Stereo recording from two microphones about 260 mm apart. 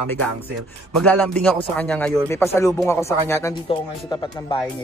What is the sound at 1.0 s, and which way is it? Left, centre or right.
Speech, centre.